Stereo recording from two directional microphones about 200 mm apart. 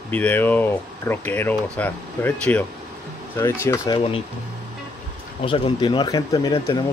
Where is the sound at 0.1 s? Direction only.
10° left (ahead or behind); by 4.2 s 25° left (ahead or behind).